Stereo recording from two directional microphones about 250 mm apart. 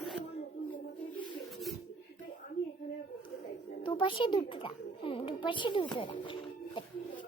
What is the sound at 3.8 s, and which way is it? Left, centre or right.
A child's voice, centre.